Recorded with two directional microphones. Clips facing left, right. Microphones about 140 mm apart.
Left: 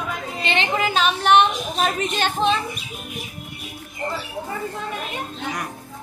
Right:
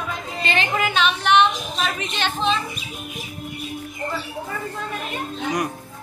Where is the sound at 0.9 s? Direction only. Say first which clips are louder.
Left 2 dB; 40° left (ahead or behind).